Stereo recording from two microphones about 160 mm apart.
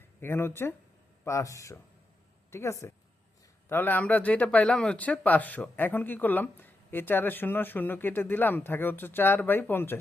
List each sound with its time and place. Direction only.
0.2 s speech: 15° left (ahead or behind)